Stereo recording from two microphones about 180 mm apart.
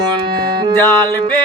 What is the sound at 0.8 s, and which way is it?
Music, 15° left (ahead or behind).